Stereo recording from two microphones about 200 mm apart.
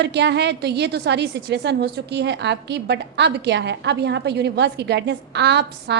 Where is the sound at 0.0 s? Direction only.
55° right (ahead or behind).